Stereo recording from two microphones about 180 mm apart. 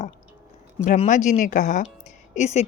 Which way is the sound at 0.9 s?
45° left (ahead or behind).